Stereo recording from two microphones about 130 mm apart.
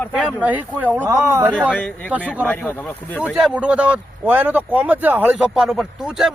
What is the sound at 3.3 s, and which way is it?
Speech, 5° right (ahead or behind).